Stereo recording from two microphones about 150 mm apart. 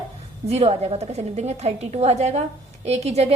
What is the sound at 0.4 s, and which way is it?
A woman's voice, 45° right (ahead or behind).